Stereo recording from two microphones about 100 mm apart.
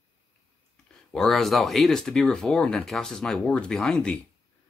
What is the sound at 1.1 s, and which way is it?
Speech, centre (ahead or behind).